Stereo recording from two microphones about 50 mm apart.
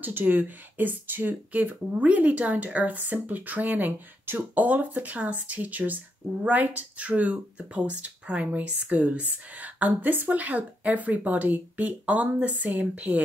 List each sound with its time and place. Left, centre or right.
0.0 s speech: right